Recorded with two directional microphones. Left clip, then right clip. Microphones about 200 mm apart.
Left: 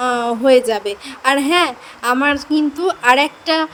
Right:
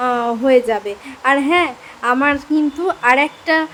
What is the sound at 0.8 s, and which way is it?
A woman's voice, 35° left (ahead or behind).